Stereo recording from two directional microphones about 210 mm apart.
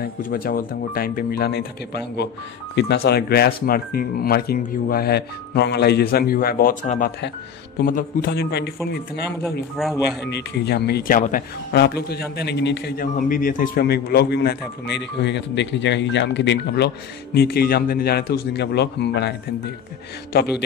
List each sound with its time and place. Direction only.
0.0 s speech: 45° left (ahead or behind)
10.2 s speech: 55° left (ahead or behind)
20.3 s speech: 50° left (ahead or behind)